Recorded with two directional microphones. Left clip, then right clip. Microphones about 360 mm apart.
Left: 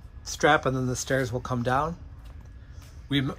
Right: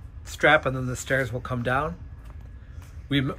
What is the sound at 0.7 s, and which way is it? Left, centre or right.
Speech, centre.